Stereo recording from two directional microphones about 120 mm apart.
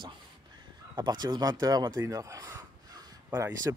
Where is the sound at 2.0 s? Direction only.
30° right (ahead or behind).